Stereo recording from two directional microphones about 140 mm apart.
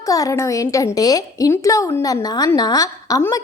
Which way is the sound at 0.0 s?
25° left (ahead or behind).